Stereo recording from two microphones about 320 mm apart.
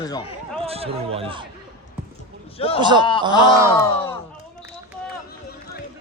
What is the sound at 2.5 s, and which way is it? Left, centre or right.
Speech, centre.